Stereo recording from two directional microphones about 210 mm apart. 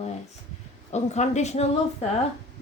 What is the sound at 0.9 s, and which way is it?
Speech, 35° left (ahead or behind).